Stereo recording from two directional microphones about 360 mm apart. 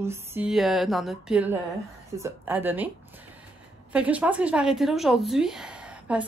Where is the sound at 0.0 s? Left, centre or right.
Centre.